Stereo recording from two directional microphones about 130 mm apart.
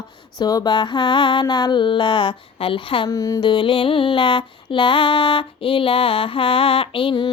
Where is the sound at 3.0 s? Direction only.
25° left (ahead or behind).